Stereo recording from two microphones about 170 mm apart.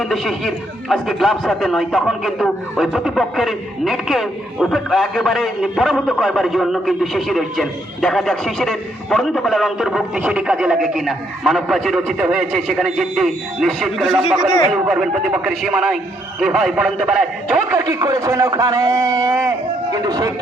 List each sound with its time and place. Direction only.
0.0 s speech: centre (ahead or behind)
17.7 s a man's voice: 20° right (ahead or behind)